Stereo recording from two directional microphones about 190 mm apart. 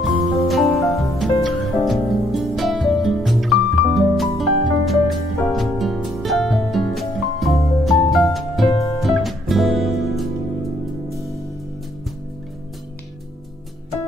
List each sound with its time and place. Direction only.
0.5 s music: centre (ahead or behind)
8.7 s music: 15° left (ahead or behind)
9.0 s music: centre (ahead or behind)